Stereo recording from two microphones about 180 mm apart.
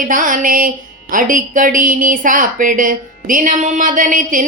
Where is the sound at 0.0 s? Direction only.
50° right (ahead or behind).